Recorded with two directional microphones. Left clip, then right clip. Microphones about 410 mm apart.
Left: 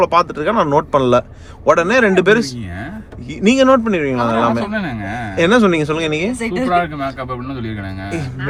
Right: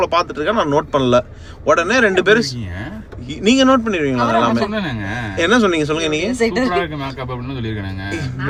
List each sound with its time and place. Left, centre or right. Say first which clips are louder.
0.0 s speech: left 3 dB; centre